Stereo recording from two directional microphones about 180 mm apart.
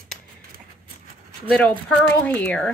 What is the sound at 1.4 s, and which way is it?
Speech, 5° left (ahead or behind).